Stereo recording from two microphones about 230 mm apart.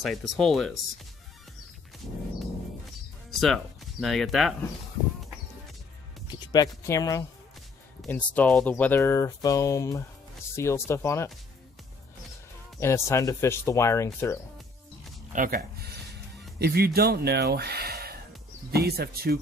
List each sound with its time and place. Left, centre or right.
0.0 s speech: centre
3.3 s speech: centre
6.2 s speech: centre
12.8 s speech: centre
15.3 s speech: right